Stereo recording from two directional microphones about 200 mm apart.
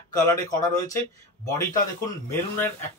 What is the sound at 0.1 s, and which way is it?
Speech, 15° left (ahead or behind).